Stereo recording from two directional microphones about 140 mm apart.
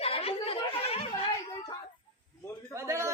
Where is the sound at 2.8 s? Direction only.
20° right (ahead or behind).